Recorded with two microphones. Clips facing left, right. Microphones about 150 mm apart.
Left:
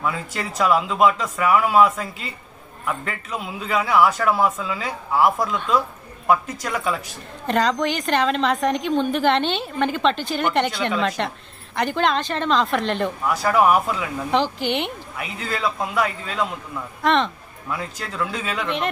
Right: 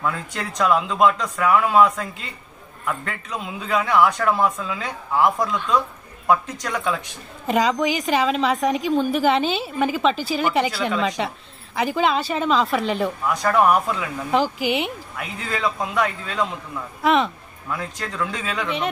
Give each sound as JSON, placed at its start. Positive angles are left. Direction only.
{"t": 0.0, "sound": "a woman's voice", "side_deg": 5}